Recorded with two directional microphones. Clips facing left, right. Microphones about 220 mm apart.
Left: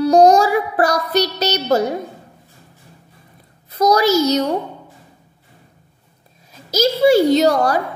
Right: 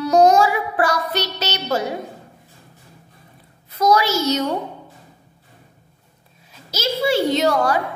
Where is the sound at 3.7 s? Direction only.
40° left (ahead or behind).